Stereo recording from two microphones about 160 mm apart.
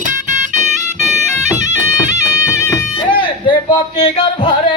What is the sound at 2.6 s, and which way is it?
Music, 20° left (ahead or behind).